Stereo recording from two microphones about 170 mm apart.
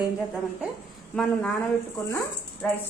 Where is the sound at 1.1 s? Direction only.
5° left (ahead or behind).